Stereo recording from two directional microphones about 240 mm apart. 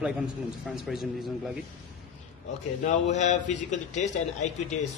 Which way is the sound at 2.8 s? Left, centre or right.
Left.